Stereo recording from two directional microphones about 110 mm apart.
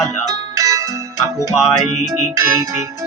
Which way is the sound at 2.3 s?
30° right (ahead or behind).